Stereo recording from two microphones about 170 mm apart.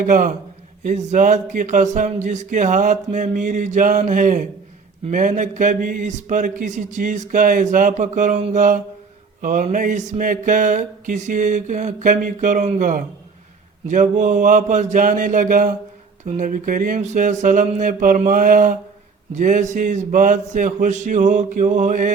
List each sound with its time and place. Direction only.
0.0 s speech: 50° right (ahead or behind)